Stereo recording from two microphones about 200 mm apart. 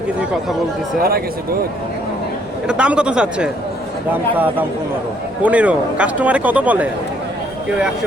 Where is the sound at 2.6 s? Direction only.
5° right (ahead or behind).